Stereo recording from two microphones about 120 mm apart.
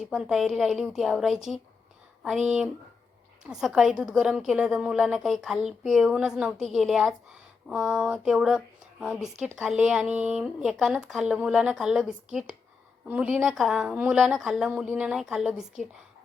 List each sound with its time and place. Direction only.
0.0 s a woman's voice: centre (ahead or behind)